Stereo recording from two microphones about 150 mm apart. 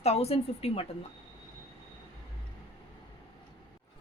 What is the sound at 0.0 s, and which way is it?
Speech, 45° left (ahead or behind).